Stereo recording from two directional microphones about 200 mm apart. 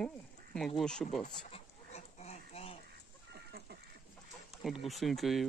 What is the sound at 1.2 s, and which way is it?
Duck, 30° left (ahead or behind).